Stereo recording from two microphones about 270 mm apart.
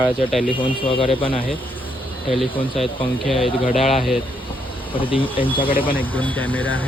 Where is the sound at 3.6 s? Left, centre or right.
Left.